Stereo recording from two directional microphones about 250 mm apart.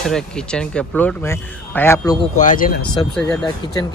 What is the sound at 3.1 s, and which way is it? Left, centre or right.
Speech, centre.